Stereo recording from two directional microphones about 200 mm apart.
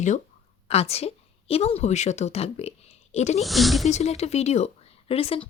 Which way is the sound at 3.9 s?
35° left (ahead or behind).